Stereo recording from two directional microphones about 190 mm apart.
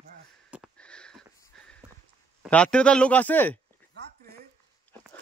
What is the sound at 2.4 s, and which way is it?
Speech, 5° left (ahead or behind).